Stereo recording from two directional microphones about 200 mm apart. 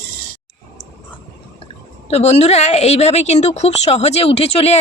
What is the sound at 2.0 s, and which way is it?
A woman's voice, 30° left (ahead or behind).